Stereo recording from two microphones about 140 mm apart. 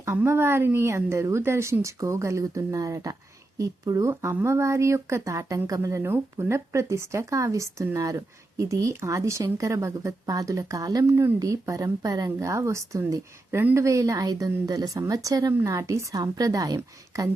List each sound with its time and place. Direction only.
0.0 s speech: 20° right (ahead or behind)